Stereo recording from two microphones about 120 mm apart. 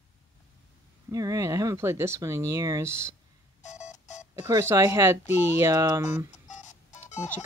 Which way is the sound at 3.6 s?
75° left (ahead or behind).